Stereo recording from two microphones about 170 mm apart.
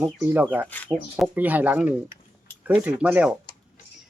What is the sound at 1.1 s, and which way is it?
Speech, 5° right (ahead or behind).